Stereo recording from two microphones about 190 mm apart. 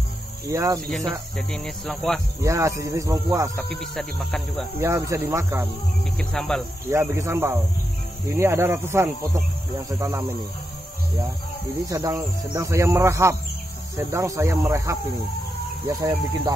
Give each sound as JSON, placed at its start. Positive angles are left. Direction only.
{"t": 0.5, "sound": "speech", "side_deg": -15}
{"t": 1.3, "sound": "speech", "side_deg": 5}
{"t": 2.4, "sound": "speech", "side_deg": -15}
{"t": 3.5, "sound": "speech", "side_deg": 5}
{"t": 4.7, "sound": "speech", "side_deg": -15}
{"t": 6.1, "sound": "speech", "side_deg": 5}
{"t": 6.9, "sound": "speech", "side_deg": -15}
{"t": 11.9, "sound": "speech", "side_deg": -20}